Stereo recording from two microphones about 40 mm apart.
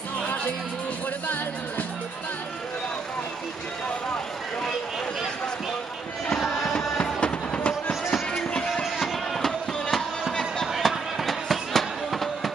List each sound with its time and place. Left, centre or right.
6.4 s music: centre
7.2 s music: left
9.0 s music: centre
10.8 s fireworks: centre